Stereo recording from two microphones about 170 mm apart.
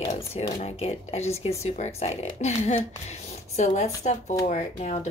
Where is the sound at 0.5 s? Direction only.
35° left (ahead or behind).